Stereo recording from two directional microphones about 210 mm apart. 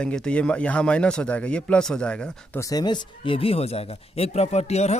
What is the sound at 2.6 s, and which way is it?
Speech, 20° left (ahead or behind).